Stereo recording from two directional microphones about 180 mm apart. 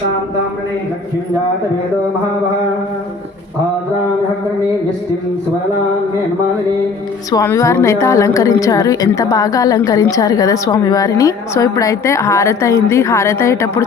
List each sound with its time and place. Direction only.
7.3 s a woman's voice: 20° left (ahead or behind)